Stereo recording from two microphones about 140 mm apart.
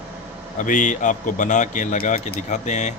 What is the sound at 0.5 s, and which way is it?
Speech, 65° left (ahead or behind).